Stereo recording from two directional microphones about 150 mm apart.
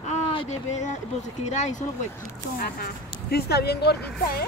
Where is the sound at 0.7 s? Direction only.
55° left (ahead or behind).